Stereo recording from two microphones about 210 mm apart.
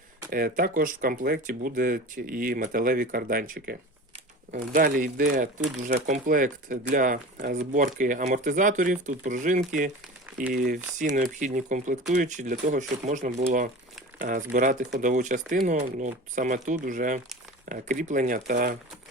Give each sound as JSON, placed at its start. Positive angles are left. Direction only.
{"t": 0.3, "sound": "speech", "side_deg": -45}